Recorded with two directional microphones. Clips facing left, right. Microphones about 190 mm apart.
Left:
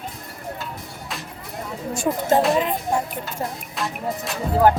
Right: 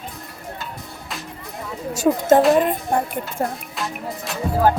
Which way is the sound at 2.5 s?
50° right (ahead or behind).